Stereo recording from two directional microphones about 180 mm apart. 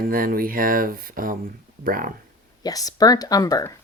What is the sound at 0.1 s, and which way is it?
Speech, 55° right (ahead or behind).